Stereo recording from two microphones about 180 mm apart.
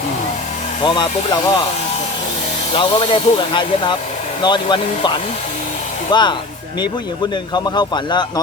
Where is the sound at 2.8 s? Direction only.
30° left (ahead or behind).